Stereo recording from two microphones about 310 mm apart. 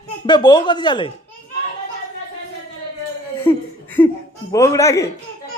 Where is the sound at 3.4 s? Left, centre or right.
Centre.